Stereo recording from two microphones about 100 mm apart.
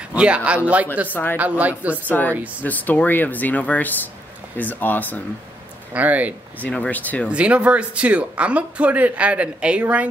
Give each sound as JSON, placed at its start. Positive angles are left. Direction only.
{"t": 0.1, "sound": "speech", "side_deg": -10}
{"t": 1.0, "sound": "speech", "side_deg": 20}
{"t": 1.4, "sound": "speech", "side_deg": -15}
{"t": 2.0, "sound": "speech", "side_deg": 20}
{"t": 5.9, "sound": "speech", "side_deg": -15}
{"t": 6.6, "sound": "speech", "side_deg": 10}
{"t": 7.2, "sound": "speech", "side_deg": -10}